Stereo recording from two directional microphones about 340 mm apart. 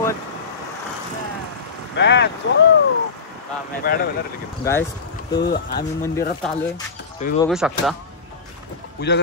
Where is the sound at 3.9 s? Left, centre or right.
Left.